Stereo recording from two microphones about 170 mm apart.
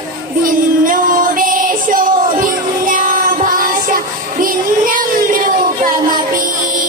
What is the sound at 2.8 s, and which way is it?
Child singing, 50° right (ahead or behind).